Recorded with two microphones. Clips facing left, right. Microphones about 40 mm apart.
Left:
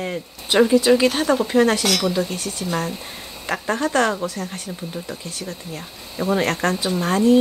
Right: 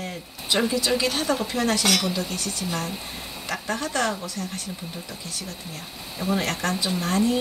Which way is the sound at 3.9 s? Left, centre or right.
Left.